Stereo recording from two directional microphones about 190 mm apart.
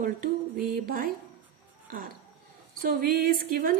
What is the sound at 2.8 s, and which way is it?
Speech, 50° right (ahead or behind).